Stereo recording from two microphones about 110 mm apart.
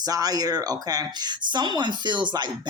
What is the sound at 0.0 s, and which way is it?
Speech, 35° right (ahead or behind).